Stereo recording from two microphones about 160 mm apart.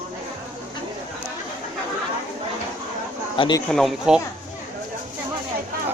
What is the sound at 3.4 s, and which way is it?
Speech, 25° left (ahead or behind).